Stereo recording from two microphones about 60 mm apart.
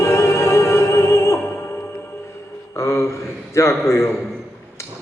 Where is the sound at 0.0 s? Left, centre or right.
Left.